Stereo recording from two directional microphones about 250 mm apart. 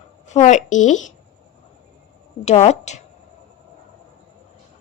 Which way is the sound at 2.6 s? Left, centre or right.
Left.